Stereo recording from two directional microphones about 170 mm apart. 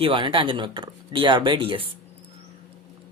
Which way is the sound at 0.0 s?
30° right (ahead or behind).